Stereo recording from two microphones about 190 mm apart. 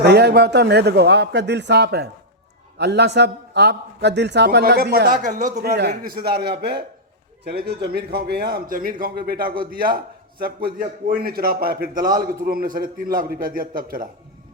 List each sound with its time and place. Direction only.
0.0 s a man's voice: 60° right (ahead or behind); by 5.5 s 40° right (ahead or behind)
5.5 s a man's voice: 55° right (ahead or behind)